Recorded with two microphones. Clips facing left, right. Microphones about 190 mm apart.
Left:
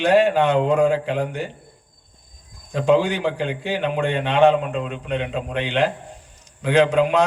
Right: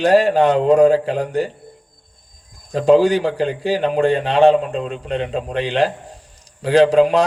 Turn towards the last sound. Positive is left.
turn(degrees=-35)  # may be behind; listen again after turning